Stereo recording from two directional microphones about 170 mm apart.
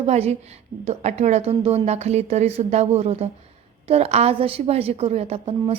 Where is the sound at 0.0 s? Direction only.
40° right (ahead or behind).